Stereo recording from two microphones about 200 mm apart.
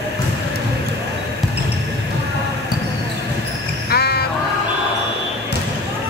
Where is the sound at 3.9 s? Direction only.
55° left (ahead or behind).